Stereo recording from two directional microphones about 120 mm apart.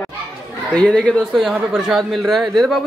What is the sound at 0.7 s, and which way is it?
Speech, 5° left (ahead or behind).